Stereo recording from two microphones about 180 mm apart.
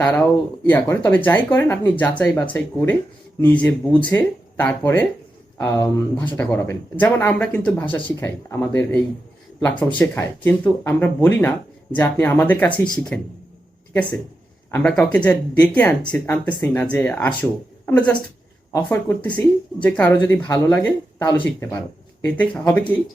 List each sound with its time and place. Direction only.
0.2 s speech: 10° left (ahead or behind)
14.7 s speech: 10° left (ahead or behind)